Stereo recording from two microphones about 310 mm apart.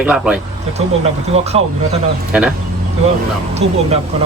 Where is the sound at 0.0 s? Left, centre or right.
Centre.